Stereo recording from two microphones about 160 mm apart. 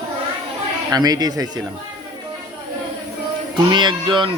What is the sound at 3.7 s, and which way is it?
Speech, 30° right (ahead or behind).